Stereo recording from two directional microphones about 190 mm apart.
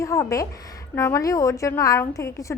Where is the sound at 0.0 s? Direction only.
15° left (ahead or behind).